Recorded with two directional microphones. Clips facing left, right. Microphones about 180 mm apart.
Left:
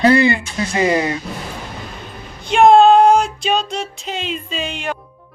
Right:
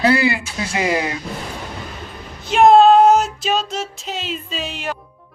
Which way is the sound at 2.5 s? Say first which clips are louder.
Left 1 dB; 5° right (ahead or behind).